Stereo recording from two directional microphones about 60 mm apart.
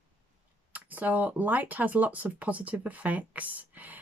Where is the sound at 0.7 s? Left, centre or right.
Right.